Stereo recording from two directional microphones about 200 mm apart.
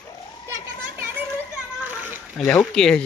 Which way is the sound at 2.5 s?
5° left (ahead or behind).